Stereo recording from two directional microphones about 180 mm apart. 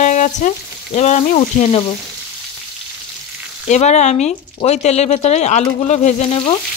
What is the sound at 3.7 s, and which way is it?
Speech, 40° left (ahead or behind).